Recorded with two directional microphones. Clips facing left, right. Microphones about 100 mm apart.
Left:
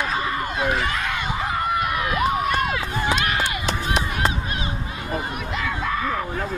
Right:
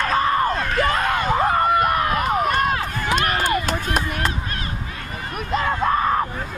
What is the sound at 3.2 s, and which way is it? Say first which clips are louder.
Run: right 3 dB; 45° right (ahead or behind).